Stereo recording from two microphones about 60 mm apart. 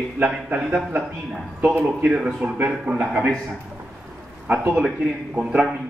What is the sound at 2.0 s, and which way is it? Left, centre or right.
Speech, centre.